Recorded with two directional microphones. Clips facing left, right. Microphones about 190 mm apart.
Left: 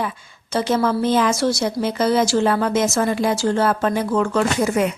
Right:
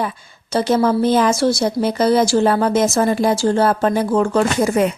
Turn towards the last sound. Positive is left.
turn(degrees=-35)  # may be behind; listen again after turning